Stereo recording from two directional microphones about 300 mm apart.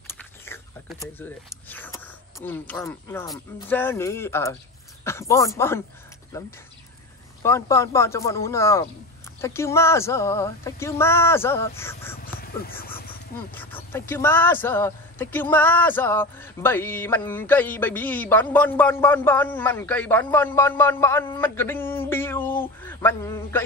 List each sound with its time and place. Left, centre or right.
0.0 s biting: centre
1.7 s a man's voice: centre
7.4 s a man's voice: centre
13.0 s a sound: left
13.6 s a man's voice: centre